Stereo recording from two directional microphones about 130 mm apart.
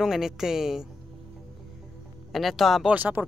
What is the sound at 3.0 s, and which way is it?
Speech, 15° right (ahead or behind).